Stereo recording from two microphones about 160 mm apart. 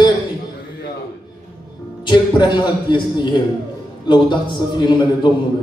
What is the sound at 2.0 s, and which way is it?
A man's voice, 30° left (ahead or behind).